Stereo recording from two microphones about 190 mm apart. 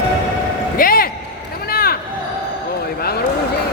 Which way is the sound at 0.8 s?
50° left (ahead or behind).